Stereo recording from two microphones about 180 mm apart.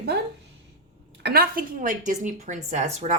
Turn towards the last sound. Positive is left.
turn(degrees=-40)  # may be behind; listen again after turning